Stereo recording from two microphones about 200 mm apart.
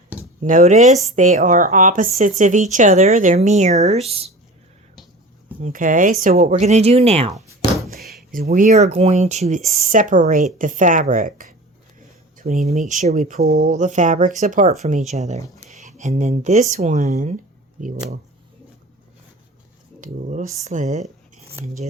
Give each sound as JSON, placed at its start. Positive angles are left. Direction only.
{"t": 0.4, "sound": "a woman's voice", "side_deg": -40}
{"t": 5.6, "sound": "a woman's voice", "side_deg": -40}
{"t": 8.3, "sound": "a woman's voice", "side_deg": -45}
{"t": 13.4, "sound": "a woman's voice", "side_deg": -45}
{"t": 20.0, "sound": "a woman's voice", "side_deg": -40}